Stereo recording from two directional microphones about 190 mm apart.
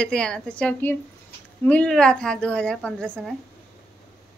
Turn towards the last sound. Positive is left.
turn(degrees=5)  # may be behind; listen again after turning